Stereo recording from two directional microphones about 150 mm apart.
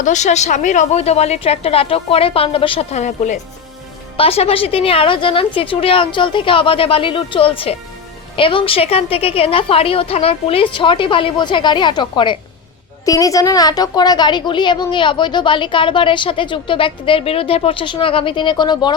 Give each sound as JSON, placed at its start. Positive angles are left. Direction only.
{"t": 0.0, "sound": "a woman's voice", "side_deg": 55}